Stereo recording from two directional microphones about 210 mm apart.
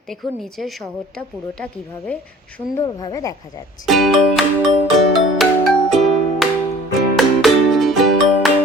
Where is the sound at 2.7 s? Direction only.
20° left (ahead or behind).